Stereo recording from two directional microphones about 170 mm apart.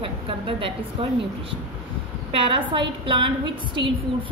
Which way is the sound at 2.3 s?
30° right (ahead or behind).